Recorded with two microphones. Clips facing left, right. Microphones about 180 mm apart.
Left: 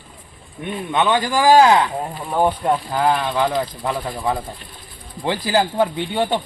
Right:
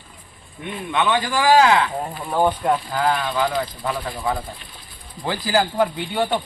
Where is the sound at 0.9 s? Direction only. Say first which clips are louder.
Left 2 dB; 20° left (ahead or behind).